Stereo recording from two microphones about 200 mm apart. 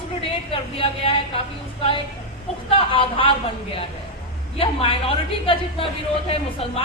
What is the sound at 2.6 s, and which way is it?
Speech, 25° left (ahead or behind).